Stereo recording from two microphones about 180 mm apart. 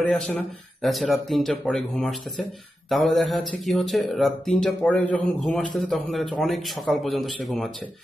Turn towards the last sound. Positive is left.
turn(degrees=0)  # may be behind; listen again after turning